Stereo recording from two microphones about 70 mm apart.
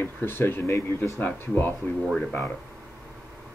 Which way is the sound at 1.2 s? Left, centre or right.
Left.